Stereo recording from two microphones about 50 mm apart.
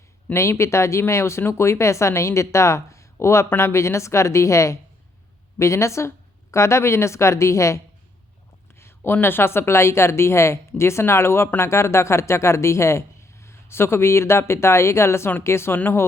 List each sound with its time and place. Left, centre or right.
0.3 s a woman's voice: left
5.5 s a woman's voice: left
9.2 s a woman's voice: left